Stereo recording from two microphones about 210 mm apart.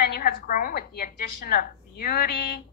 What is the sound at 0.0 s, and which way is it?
A woman's voice, 45° left (ahead or behind).